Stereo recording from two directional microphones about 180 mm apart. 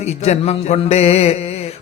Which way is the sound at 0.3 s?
40° left (ahead or behind).